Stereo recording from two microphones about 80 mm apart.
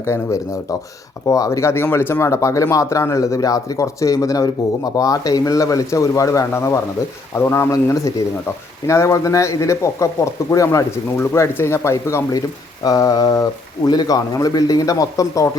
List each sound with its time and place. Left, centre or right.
0.0 s speech: left
12.8 s speech: left
13.8 s speech: left